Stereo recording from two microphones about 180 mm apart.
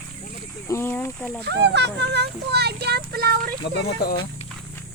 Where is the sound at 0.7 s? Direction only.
15° left (ahead or behind).